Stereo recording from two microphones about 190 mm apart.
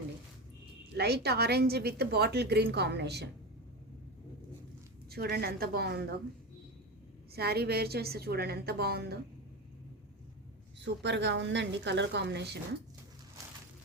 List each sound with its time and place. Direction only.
0.9 s a woman's voice: 60° right (ahead or behind)
5.0 s a woman's voice: 55° right (ahead or behind)
7.3 s a woman's voice: 55° right (ahead or behind)
10.8 s a woman's voice: 70° right (ahead or behind)